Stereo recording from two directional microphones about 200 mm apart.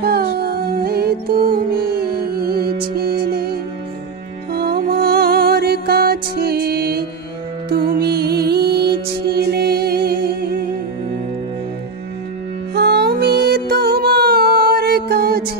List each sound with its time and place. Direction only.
0.0 s music: 50° right (ahead or behind)
4.6 s music: 50° right (ahead or behind)
12.7 s music: 55° right (ahead or behind)